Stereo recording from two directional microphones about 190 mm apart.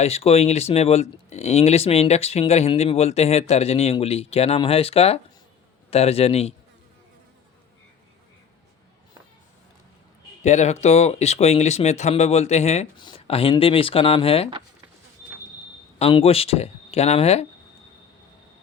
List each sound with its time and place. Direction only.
0.0 s speech: 30° left (ahead or behind)
10.4 s speech: 35° left (ahead or behind)
16.0 s speech: 30° left (ahead or behind)